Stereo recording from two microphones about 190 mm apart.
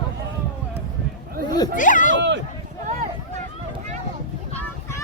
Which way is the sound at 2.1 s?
70° right (ahead or behind).